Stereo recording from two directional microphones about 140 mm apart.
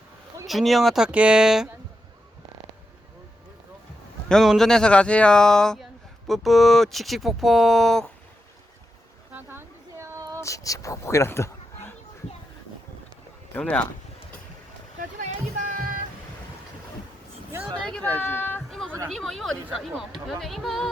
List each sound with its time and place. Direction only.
0.4 s speech: centre (ahead or behind)
4.3 s speech: centre (ahead or behind)
9.3 s a sound: 15° right (ahead or behind)
10.4 s speech: 25° left (ahead or behind)
13.5 s speech: 10° left (ahead or behind)
14.9 s a sound: 70° right (ahead or behind)
17.8 s speech: 10° left (ahead or behind)
18.7 s a sound: centre (ahead or behind)
19.1 s speech: centre (ahead or behind)